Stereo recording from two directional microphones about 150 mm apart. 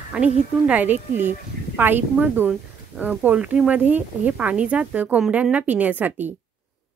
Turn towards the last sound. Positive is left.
turn(degrees=-10)  # may be behind; listen again after turning